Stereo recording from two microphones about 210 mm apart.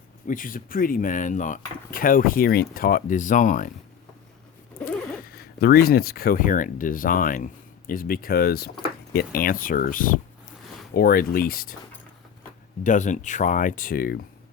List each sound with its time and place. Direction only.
0.3 s speech: 40° left (ahead or behind)
4.9 s speech: 45° left (ahead or behind)
12.8 s speech: 35° left (ahead or behind)